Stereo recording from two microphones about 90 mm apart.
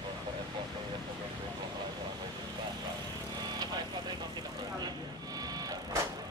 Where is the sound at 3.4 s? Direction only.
50° right (ahead or behind).